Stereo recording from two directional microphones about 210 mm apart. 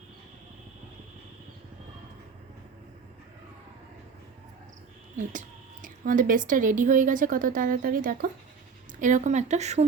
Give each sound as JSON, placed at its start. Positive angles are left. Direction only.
{"t": 5.1, "sound": "speech", "side_deg": -40}